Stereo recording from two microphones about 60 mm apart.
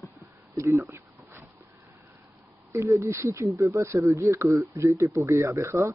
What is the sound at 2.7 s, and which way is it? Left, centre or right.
Speech, right.